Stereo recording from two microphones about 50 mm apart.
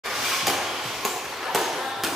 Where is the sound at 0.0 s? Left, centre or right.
Centre.